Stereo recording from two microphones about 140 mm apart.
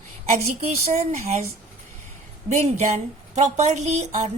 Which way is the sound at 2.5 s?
50° right (ahead or behind).